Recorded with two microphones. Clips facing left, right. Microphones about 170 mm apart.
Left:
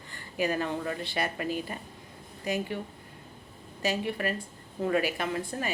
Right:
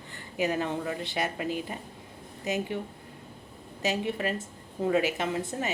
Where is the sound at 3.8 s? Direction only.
20° right (ahead or behind).